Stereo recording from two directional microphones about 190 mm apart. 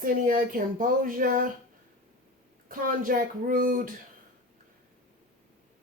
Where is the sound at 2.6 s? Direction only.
45° right (ahead or behind).